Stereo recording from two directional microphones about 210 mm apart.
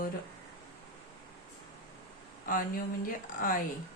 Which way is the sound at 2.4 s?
40° left (ahead or behind).